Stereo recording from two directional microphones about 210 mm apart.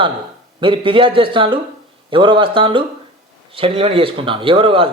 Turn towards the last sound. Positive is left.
turn(degrees=-25)  # may be behind; listen again after turning